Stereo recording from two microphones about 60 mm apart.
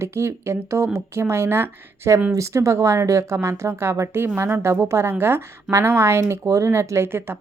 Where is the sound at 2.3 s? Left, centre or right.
Right.